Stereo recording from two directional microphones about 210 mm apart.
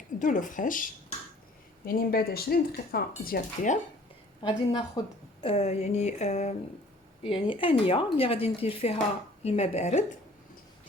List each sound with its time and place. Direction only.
0.2 s a woman's voice: 40° left (ahead or behind)
1.9 s a woman's voice: 45° left (ahead or behind)
4.4 s a woman's voice: 20° left (ahead or behind)